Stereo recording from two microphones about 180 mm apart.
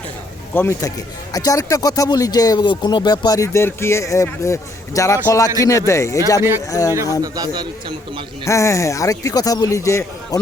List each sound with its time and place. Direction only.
0.5 s a man's voice: 15° left (ahead or behind)
7.2 s a man's voice: 20° right (ahead or behind)
8.4 s a man's voice: 15° left (ahead or behind)